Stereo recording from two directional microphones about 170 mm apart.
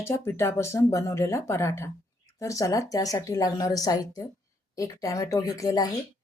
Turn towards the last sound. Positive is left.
turn(degrees=20)  # may be behind; listen again after turning